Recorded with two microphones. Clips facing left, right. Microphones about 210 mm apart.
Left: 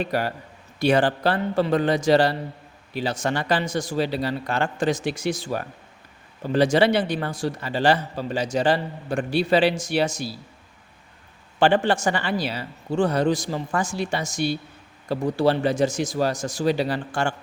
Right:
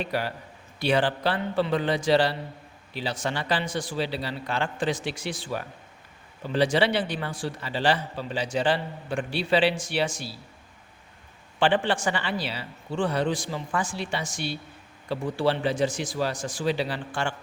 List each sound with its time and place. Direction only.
0.0 s a man's voice: 45° left (ahead or behind)
11.6 s a man's voice: 45° left (ahead or behind)